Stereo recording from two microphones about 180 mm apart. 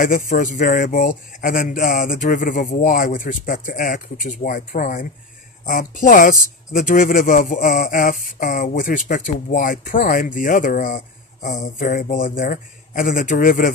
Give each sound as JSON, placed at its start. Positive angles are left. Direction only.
{"t": 0.0, "sound": "speech", "side_deg": 45}